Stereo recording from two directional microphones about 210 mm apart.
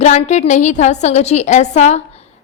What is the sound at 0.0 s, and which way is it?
A woman's voice, 35° left (ahead or behind).